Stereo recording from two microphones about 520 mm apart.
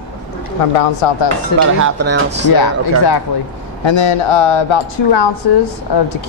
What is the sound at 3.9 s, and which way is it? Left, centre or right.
Speech, left.